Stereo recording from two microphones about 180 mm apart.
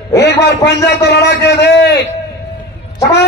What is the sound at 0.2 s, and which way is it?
A man's voice, 70° left (ahead or behind).